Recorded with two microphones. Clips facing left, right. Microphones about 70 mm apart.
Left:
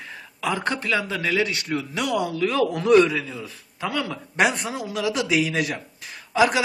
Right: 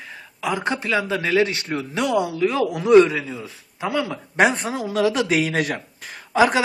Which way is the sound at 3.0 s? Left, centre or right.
Right.